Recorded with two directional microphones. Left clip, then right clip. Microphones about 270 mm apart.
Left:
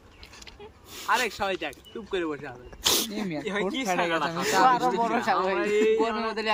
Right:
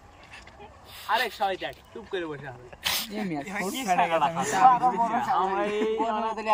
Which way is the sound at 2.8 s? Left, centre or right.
Left.